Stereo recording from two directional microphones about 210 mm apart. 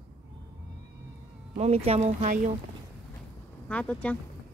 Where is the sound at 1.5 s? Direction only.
30° right (ahead or behind).